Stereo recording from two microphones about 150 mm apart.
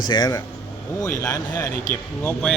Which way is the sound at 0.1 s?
25° left (ahead or behind).